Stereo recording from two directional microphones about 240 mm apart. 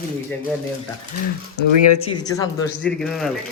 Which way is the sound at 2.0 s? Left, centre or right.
Centre.